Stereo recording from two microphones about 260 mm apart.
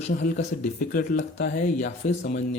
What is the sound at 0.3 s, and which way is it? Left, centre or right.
Speech, left.